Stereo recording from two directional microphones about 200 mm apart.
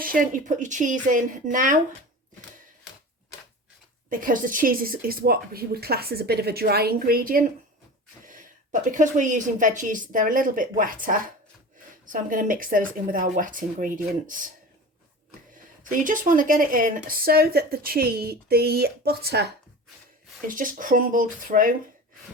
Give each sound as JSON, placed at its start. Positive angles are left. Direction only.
{"t": 0.0, "sound": "speech", "side_deg": -45}
{"t": 4.1, "sound": "a woman's voice", "side_deg": -40}
{"t": 15.8, "sound": "a woman's voice", "side_deg": -40}
{"t": 20.5, "sound": "a woman's voice", "side_deg": -40}